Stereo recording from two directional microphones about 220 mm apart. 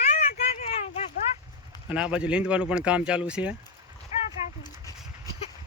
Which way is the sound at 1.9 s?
5° right (ahead or behind).